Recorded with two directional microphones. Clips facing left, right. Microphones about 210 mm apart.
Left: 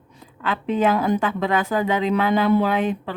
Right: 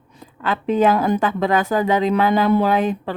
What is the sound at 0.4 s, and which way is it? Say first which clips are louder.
A woman's voice: right 3 dB; 40° right (ahead or behind).